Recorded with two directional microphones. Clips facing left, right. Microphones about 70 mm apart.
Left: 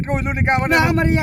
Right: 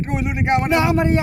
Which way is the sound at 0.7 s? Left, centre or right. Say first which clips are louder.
Left 2 dB; left.